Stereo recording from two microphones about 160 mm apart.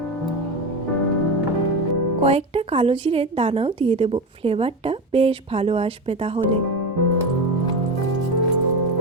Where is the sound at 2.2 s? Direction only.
40° right (ahead or behind).